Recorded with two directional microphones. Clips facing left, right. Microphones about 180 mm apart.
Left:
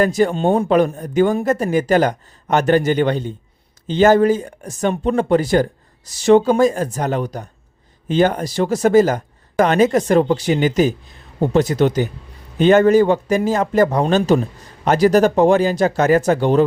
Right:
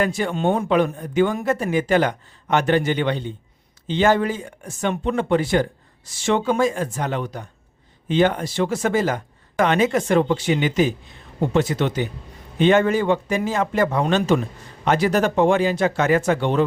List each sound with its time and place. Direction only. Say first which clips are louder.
0.0 s speech: left 5 dB; 40° left (ahead or behind)